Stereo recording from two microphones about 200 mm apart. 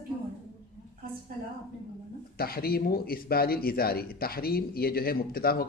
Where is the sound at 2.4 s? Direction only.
50° left (ahead or behind).